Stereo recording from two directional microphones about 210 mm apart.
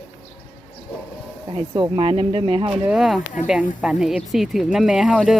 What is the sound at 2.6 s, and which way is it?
Speech, 5° right (ahead or behind).